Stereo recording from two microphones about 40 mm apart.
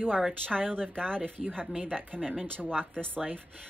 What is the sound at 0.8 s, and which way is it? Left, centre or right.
Speech, left.